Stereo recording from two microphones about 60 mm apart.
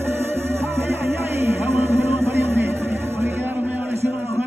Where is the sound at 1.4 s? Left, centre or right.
Right.